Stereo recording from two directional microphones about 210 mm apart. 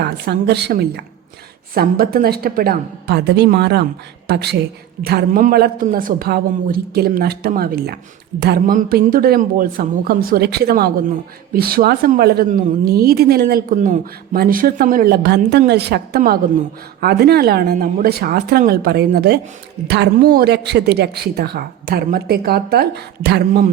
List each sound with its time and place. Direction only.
0.0 s speech: 50° right (ahead or behind)